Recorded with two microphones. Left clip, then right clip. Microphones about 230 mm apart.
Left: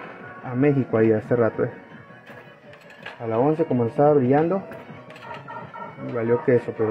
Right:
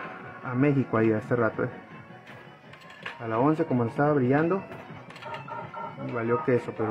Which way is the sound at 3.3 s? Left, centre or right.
Centre.